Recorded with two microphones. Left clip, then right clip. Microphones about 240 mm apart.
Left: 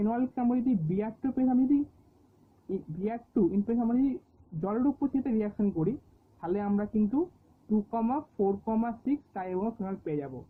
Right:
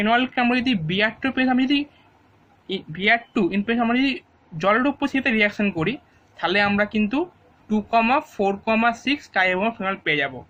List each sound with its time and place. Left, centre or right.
0.0 s speech: right
2.6 s speech: right